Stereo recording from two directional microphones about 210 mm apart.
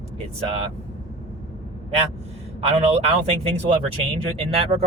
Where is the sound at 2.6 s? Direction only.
30° right (ahead or behind).